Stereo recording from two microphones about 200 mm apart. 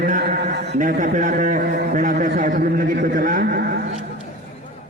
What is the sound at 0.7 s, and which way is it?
A man's voice, 40° right (ahead or behind).